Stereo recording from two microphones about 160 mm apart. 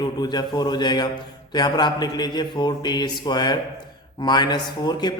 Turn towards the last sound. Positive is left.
turn(degrees=25)  # may be behind; listen again after turning